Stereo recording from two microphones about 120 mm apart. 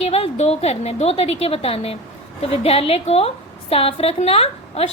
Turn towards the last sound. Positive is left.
turn(degrees=60)  # may be behind; listen again after turning